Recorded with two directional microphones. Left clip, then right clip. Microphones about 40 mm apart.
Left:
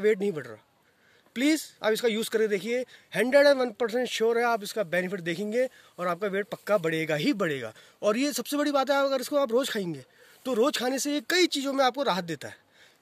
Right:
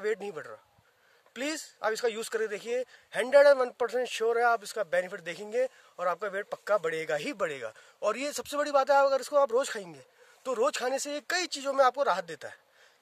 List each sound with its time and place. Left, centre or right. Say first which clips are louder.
0.0 s speech: left 7 dB; right
3.3 s speech: even; right
5.9 s speech: left 2 dB; right